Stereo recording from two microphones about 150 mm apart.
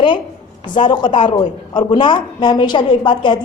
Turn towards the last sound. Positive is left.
turn(degrees=30)  # may be behind; listen again after turning